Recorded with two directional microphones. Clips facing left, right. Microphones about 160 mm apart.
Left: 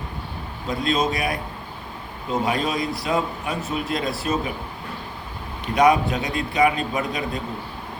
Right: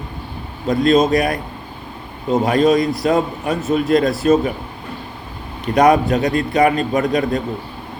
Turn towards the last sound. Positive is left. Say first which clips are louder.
# right 9 dB
turn(degrees=-45)  # may be behind; listen again after turning